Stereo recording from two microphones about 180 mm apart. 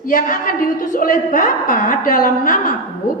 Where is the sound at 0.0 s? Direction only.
50° left (ahead or behind).